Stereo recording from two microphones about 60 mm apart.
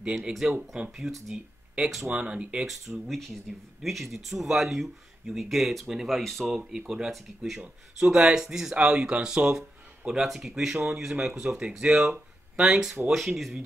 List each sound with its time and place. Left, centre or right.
0.3 s speech: centre
2.0 s speech: centre
2.6 s speech: centre
9.6 s a sound: centre
10.2 s speech: centre
13.1 s speech: centre